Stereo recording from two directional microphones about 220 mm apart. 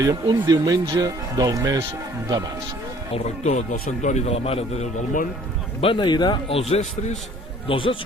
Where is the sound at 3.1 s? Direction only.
30° left (ahead or behind).